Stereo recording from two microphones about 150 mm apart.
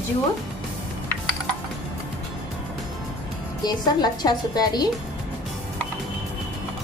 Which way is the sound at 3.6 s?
25° left (ahead or behind).